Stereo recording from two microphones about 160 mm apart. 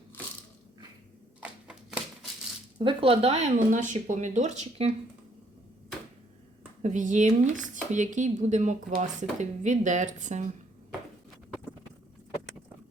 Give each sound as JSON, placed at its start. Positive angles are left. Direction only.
{"t": 1.4, "sound": "a sound", "side_deg": -5}
{"t": 2.7, "sound": "speech", "side_deg": -35}
{"t": 6.8, "sound": "speech", "side_deg": -50}